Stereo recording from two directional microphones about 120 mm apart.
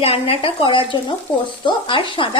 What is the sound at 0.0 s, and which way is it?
Speech, 55° left (ahead or behind).